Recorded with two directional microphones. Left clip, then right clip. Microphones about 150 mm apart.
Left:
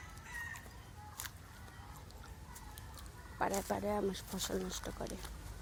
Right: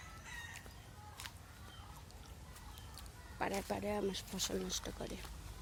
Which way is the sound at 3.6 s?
5° right (ahead or behind).